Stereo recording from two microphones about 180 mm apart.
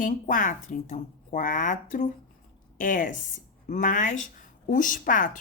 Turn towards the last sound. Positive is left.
turn(degrees=50)  # may be behind; listen again after turning